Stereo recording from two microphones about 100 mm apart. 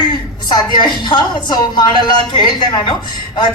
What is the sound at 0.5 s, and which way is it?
A woman's voice, 50° left (ahead or behind).